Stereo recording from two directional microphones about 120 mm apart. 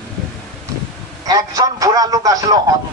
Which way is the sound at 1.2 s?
30° right (ahead or behind).